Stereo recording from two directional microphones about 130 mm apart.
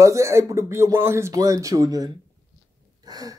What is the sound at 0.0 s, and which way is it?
Speech, 25° right (ahead or behind).